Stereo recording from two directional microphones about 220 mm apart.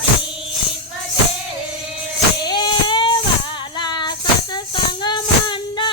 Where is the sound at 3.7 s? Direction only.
20° left (ahead or behind).